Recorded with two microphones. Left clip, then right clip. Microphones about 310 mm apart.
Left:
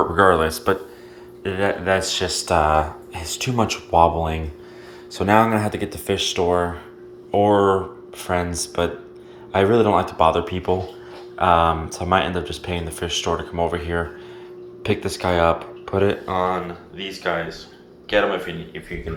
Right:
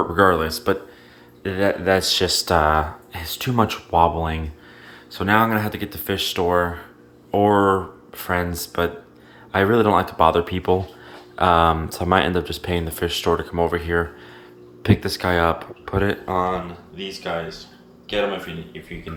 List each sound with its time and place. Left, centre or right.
0.0 s speech: centre
12.4 s speech: right
12.6 s speech: right
17.0 s speech: centre